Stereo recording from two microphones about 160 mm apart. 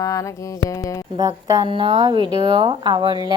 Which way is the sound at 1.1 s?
25° right (ahead or behind).